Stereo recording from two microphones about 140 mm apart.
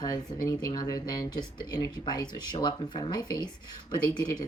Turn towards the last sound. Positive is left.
turn(degrees=30)  # may be behind; listen again after turning